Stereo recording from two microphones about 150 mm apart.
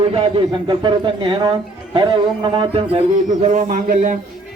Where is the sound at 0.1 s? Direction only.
35° right (ahead or behind).